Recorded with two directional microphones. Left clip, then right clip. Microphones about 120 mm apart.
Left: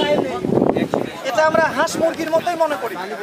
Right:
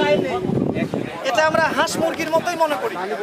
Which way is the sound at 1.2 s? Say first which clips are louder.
Left 1 dB; centre (ahead or behind).